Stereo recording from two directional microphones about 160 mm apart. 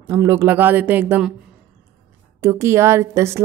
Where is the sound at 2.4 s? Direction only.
15° right (ahead or behind).